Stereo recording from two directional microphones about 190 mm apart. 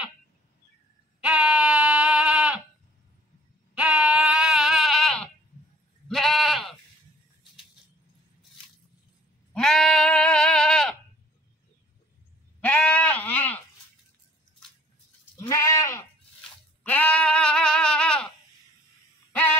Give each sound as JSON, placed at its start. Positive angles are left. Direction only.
{"t": 1.2, "sound": "a sound", "side_deg": -5}
{"t": 3.7, "sound": "sheep", "side_deg": -5}
{"t": 9.5, "sound": "sheep", "side_deg": 5}
{"t": 12.5, "sound": "sheep", "side_deg": 5}
{"t": 15.3, "sound": "goat", "side_deg": 15}
{"t": 16.8, "sound": "bleat", "side_deg": 10}